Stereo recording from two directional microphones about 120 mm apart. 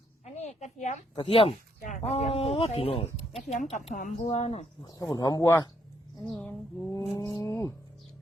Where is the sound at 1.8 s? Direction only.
80° left; by 3.4 s 55° left (ahead or behind).